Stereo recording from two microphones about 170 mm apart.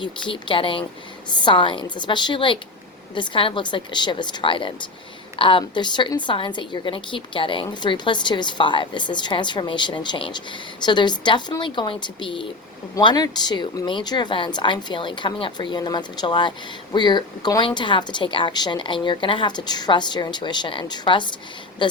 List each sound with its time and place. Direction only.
0.0 s a woman's voice: 30° left (ahead or behind)